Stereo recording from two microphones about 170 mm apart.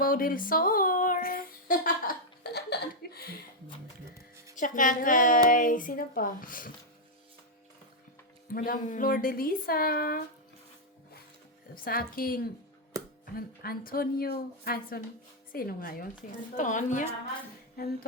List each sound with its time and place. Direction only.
0.0 s a sound: 55° left (ahead or behind)
4.5 s speech: 50° left (ahead or behind)
8.5 s speech: 55° left (ahead or behind)
11.7 s speech: 60° left (ahead or behind)
16.6 s speech: 45° left (ahead or behind)